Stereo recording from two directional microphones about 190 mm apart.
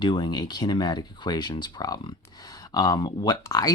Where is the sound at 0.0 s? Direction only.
25° left (ahead or behind).